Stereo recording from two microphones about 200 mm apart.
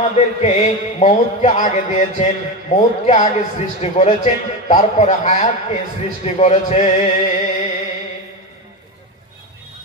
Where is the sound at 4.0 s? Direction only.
35° left (ahead or behind).